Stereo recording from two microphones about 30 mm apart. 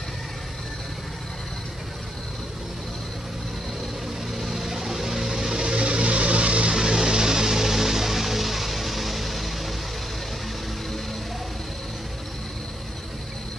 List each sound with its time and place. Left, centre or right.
4.4 s vehicle: centre
5.7 s vehicle: right
6.7 s music: centre